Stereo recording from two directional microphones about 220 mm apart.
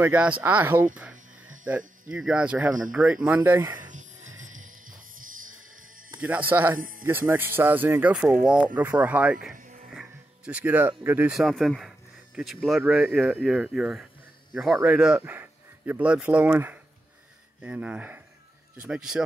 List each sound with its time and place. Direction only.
0.0 s speech: 5° right (ahead or behind)
4.4 s music: 35° right (ahead or behind)
6.2 s speech: 10° right (ahead or behind)